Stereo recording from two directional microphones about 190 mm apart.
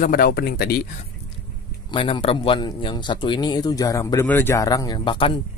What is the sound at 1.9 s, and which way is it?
A man's voice, 25° left (ahead or behind).